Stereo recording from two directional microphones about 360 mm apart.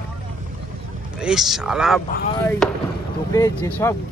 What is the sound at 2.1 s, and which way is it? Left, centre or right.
Speech, left.